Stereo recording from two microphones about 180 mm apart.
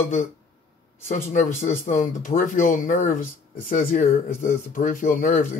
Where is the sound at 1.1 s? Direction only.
45° left (ahead or behind).